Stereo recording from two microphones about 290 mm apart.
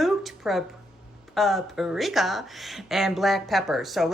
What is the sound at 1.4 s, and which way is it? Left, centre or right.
Speech, centre.